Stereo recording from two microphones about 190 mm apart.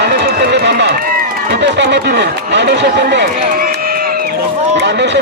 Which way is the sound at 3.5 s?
50° right (ahead or behind).